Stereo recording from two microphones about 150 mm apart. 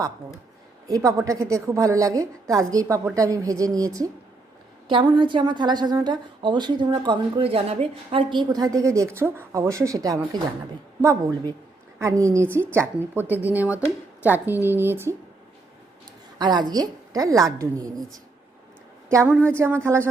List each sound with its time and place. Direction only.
0.9 s a woman's voice: 20° right (ahead or behind)
16.4 s a woman's voice: 30° right (ahead or behind)
19.3 s a woman's voice: 15° right (ahead or behind)